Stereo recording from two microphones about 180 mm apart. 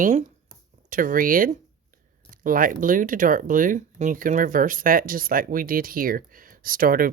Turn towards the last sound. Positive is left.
turn(degrees=-50)  # may be behind; listen again after turning